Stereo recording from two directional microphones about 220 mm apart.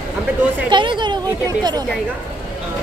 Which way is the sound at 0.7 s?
20° right (ahead or behind).